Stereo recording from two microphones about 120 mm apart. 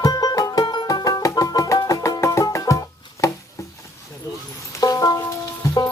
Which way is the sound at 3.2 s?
30° left (ahead or behind).